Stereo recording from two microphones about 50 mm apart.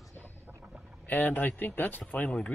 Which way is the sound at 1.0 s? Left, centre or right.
Left.